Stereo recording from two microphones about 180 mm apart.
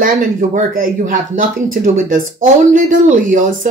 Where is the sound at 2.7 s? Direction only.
45° right (ahead or behind).